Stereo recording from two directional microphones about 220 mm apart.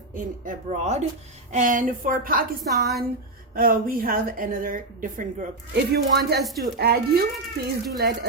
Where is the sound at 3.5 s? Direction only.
40° right (ahead or behind).